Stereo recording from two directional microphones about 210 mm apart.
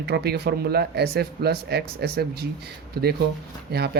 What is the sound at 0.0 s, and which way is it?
Speech, 50° right (ahead or behind).